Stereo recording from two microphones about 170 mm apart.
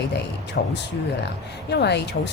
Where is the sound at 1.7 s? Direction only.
80° left.